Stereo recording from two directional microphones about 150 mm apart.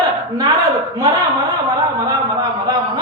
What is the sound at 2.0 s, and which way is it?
Speech, 25° right (ahead or behind).